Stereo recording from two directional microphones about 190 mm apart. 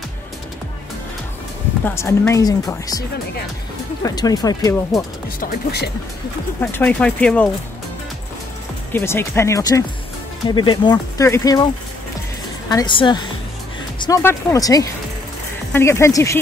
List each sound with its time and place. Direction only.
1.9 s speech: 15° left (ahead or behind)
4.0 s speech: 20° left (ahead or behind)
5.4 s speech: 55° left (ahead or behind)
6.6 s speech: 10° left (ahead or behind)
8.9 s speech: 15° left (ahead or behind)
13.9 s music: 20° left (ahead or behind)
14.2 s speech: 15° left (ahead or behind)